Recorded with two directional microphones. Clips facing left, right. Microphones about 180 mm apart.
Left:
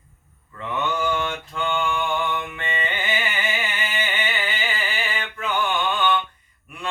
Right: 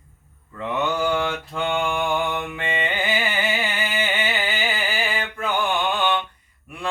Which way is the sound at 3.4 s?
35° right (ahead or behind).